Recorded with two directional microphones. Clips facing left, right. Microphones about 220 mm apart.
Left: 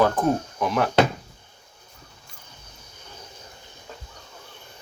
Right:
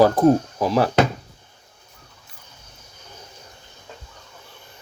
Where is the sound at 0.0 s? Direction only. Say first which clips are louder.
Right 6 dB; 35° right (ahead or behind).